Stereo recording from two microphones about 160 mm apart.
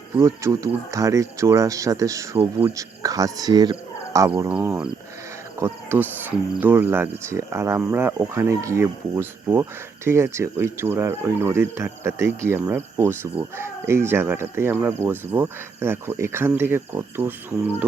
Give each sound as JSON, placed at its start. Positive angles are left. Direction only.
{"t": 0.2, "sound": "speech", "side_deg": -20}
{"t": 2.4, "sound": "speech", "side_deg": -35}
{"t": 2.7, "sound": "speech", "side_deg": -20}
{"t": 4.4, "sound": "speech", "side_deg": -10}